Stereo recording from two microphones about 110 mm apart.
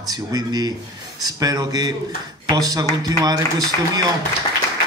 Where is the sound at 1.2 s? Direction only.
35° right (ahead or behind).